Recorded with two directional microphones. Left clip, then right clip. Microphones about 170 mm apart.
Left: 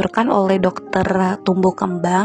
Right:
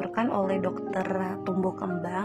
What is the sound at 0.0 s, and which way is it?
A woman's voice, 50° left (ahead or behind).